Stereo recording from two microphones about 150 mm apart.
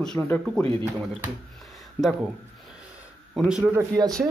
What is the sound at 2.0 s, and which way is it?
Speech, 10° left (ahead or behind).